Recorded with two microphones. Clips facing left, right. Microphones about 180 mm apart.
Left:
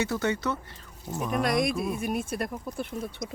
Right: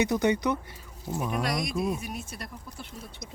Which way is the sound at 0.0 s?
15° right (ahead or behind).